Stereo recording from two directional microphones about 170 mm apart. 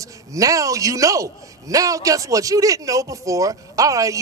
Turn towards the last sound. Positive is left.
turn(degrees=-20)  # may be behind; listen again after turning